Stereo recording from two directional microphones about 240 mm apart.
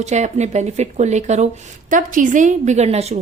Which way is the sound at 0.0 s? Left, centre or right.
Right.